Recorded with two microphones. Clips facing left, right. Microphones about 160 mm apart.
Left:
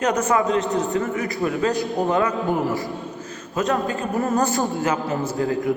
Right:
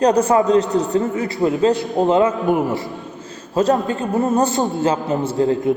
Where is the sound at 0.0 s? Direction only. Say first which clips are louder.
Right 6 dB; 30° right (ahead or behind).